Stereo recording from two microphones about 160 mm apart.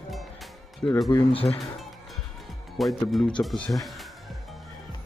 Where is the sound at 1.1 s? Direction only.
35° left (ahead or behind).